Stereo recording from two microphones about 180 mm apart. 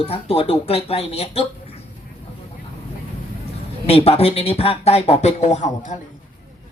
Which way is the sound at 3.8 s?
35° left (ahead or behind).